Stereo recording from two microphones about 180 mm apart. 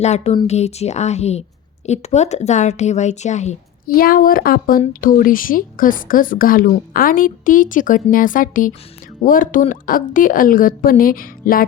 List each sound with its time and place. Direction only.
0.0 s a woman's voice: 40° left (ahead or behind)
3.9 s speech: 55° left (ahead or behind)